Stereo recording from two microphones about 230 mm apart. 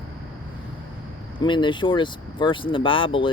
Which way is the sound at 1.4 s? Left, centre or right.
Left.